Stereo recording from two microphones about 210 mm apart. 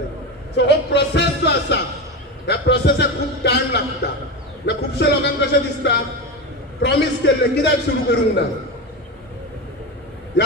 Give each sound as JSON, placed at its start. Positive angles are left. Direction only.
{"t": 0.6, "sound": "speech", "side_deg": 55}
{"t": 2.4, "sound": "a sound", "side_deg": 55}
{"t": 4.6, "sound": "a man's voice", "side_deg": 55}